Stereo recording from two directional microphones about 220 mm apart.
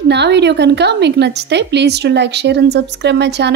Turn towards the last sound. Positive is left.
turn(degrees=-50)  # may be behind; listen again after turning